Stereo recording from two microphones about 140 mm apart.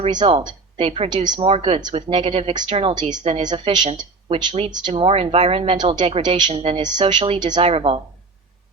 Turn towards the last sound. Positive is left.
turn(degrees=-45)  # may be behind; listen again after turning